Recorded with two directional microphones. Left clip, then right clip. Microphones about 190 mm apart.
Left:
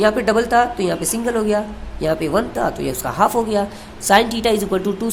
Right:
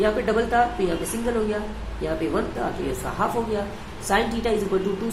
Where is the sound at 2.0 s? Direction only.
50° left (ahead or behind).